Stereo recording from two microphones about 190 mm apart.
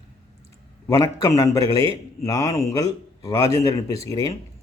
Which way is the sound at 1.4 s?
15° left (ahead or behind).